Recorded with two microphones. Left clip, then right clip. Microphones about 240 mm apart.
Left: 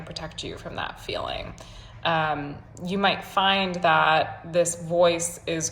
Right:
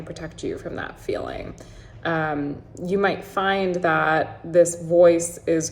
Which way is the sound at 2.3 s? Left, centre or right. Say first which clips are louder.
Right 3 dB; centre.